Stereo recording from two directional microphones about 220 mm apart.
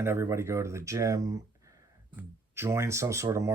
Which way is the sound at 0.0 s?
10° right (ahead or behind).